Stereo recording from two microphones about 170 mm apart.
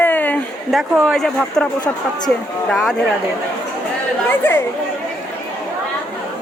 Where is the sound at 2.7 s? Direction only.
Centre (ahead or behind).